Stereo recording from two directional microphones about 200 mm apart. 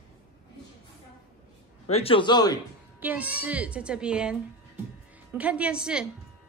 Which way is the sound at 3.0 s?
10° right (ahead or behind).